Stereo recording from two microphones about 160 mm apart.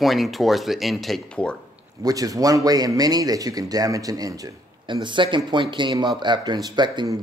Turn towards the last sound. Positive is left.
turn(degrees=-30)  # may be behind; listen again after turning